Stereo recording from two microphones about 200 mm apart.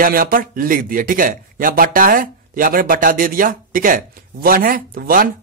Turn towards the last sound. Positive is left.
turn(degrees=-45)  # may be behind; listen again after turning